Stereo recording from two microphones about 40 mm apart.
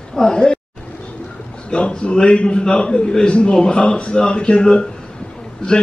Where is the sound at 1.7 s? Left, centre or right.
Left.